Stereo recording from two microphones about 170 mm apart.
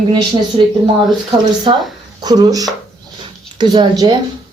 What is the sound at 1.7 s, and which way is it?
Speech, 30° right (ahead or behind).